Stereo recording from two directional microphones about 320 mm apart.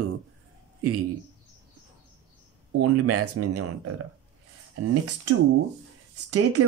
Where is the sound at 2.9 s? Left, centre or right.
Right.